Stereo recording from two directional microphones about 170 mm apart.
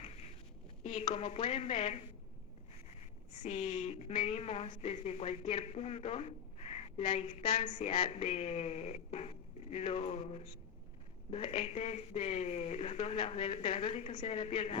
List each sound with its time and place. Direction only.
1.0 s speech: 40° left (ahead or behind)
3.4 s speech: 40° left (ahead or behind)
7.6 s speech: 40° left (ahead or behind)